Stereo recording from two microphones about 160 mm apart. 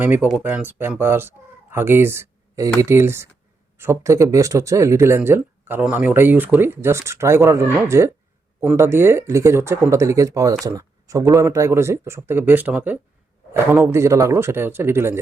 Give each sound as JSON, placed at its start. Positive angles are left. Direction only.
{"t": 0.0, "sound": "speech", "side_deg": -10}